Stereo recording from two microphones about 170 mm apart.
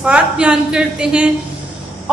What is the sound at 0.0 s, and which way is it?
A woman's voice, 5° right (ahead or behind).